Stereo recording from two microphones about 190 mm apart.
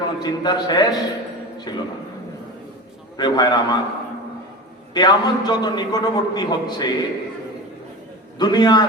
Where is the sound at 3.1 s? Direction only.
20° left (ahead or behind).